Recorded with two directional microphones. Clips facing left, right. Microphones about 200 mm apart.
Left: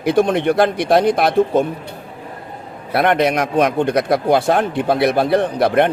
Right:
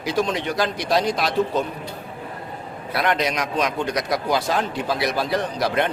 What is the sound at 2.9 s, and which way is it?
Speech, 55° left (ahead or behind).